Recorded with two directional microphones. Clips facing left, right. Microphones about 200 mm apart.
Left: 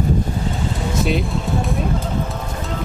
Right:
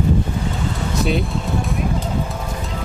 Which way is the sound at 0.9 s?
Centre (ahead or behind).